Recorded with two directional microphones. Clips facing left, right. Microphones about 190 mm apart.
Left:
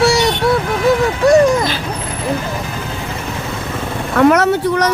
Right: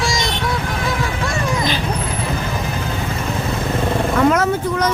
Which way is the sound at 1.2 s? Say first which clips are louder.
Left 16 dB; 40° left (ahead or behind).